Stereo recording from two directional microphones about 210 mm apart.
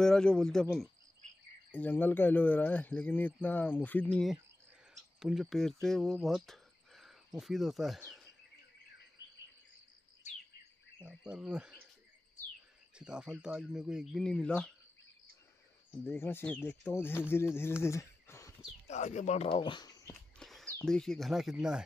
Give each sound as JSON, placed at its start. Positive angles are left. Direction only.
{"t": 0.0, "sound": "speech", "side_deg": 0}
{"t": 8.0, "sound": "a sound", "side_deg": 0}
{"t": 9.2, "sound": "cricket", "side_deg": 60}
{"t": 11.0, "sound": "speech", "side_deg": -5}
{"t": 12.9, "sound": "speech", "side_deg": -5}
{"t": 16.0, "sound": "speech", "side_deg": 10}
{"t": 17.8, "sound": "a sound", "side_deg": 10}
{"t": 18.9, "sound": "speech", "side_deg": 35}
{"t": 20.3, "sound": "a sound", "side_deg": 0}
{"t": 20.8, "sound": "speech", "side_deg": 0}